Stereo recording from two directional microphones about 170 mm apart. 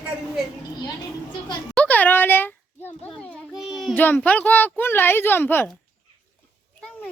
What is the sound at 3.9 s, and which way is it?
Speech, 10° left (ahead or behind).